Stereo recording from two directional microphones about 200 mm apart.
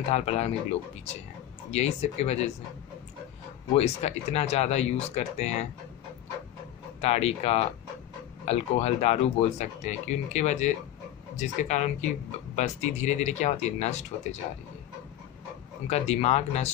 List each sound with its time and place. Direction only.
0.1 s speech: 35° left (ahead or behind)
1.7 s speech: 35° left (ahead or behind)
3.7 s speech: 30° left (ahead or behind)
7.0 s speech: 30° left (ahead or behind)
15.9 s speech: 30° left (ahead or behind)